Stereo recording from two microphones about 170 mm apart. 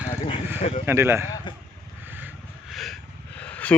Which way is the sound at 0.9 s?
15° right (ahead or behind).